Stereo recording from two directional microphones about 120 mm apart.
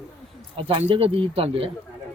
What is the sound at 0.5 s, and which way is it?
Speech, 55° right (ahead or behind).